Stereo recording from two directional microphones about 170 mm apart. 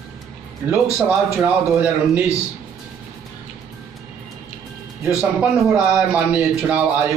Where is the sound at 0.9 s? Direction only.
5° right (ahead or behind).